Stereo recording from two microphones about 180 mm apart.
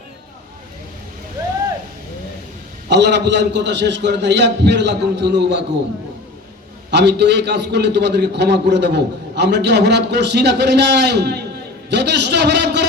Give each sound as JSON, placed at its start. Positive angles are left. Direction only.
{"t": 2.9, "sound": "a man's voice", "side_deg": -70}
{"t": 6.9, "sound": "a man's voice", "side_deg": -70}